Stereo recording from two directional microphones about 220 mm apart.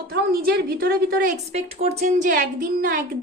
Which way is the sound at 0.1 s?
45° right (ahead or behind).